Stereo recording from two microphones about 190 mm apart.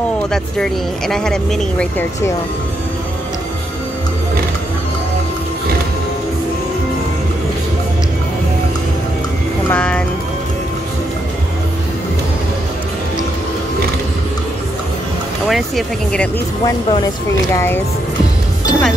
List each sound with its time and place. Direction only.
0.3 s speech: 5° left (ahead or behind)
9.7 s speech: 5° left (ahead or behind)
15.4 s speech: centre (ahead or behind)
16.6 s speech: 20° left (ahead or behind)
18.7 s speech: centre (ahead or behind)